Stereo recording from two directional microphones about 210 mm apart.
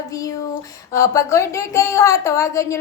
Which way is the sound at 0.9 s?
15° left (ahead or behind).